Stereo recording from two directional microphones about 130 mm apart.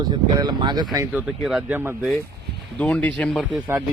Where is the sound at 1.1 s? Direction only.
10° right (ahead or behind).